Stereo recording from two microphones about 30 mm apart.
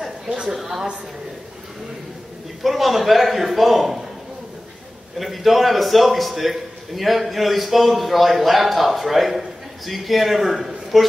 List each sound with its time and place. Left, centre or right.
0.3 s a sound: centre
2.6 s a man's voice: centre
5.2 s a man's voice: centre